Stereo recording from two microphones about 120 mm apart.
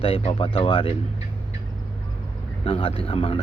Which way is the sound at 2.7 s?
50° left (ahead or behind).